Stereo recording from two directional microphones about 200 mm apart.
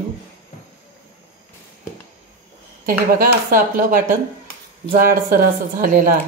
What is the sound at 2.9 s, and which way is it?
A woman's voice, 45° right (ahead or behind).